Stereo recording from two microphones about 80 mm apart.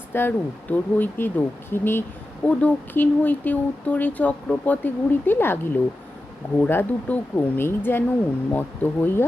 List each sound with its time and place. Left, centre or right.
0.1 s speech: left
2.5 s speech: centre